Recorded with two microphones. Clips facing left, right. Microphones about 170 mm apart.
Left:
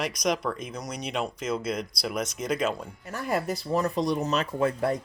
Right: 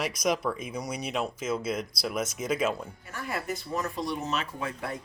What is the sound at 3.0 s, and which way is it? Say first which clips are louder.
Speech: left 6 dB; 40° left (ahead or behind).